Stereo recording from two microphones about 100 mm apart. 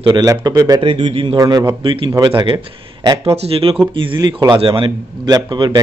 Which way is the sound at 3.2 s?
80° right.